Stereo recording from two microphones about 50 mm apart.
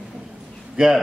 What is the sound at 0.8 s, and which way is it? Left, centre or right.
Speech, centre.